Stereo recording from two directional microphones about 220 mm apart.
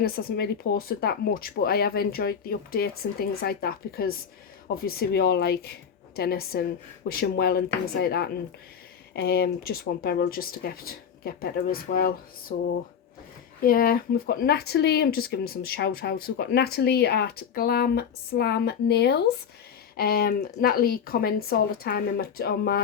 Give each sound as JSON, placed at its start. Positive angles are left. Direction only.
{"t": 0.0, "sound": "speech", "side_deg": 45}
{"t": 13.6, "sound": "speech", "side_deg": 40}